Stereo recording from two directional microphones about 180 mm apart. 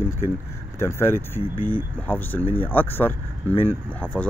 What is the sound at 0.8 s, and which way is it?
Speech, 15° left (ahead or behind).